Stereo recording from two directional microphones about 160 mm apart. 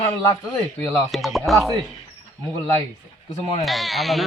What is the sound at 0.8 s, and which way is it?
Speech, centre (ahead or behind).